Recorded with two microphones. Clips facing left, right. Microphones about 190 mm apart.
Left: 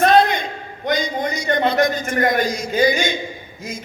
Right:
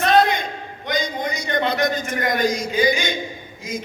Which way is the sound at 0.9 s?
50° left (ahead or behind).